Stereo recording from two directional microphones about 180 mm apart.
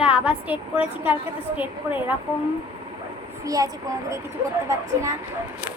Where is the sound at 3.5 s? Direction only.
20° right (ahead or behind).